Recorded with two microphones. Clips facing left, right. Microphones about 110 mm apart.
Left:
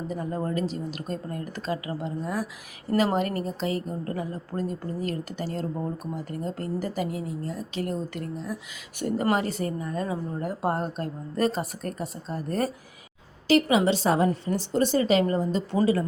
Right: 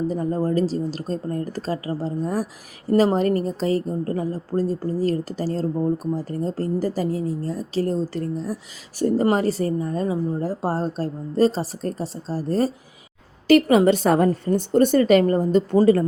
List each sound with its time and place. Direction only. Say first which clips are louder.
0.1 s a woman's voice: right 7 dB; 35° right (ahead or behind)
13.5 s speech: right 6 dB; 50° right (ahead or behind)